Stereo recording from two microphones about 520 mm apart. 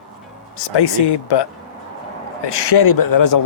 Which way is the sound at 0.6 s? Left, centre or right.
Left.